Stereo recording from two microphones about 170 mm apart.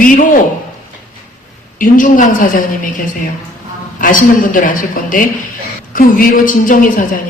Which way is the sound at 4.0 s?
50° left (ahead or behind).